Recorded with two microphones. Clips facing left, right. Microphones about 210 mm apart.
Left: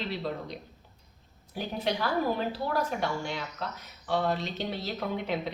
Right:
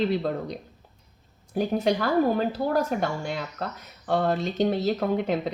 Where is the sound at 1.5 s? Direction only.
45° right (ahead or behind).